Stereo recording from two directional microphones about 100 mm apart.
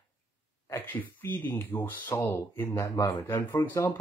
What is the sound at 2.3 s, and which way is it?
Speech, 30° left (ahead or behind).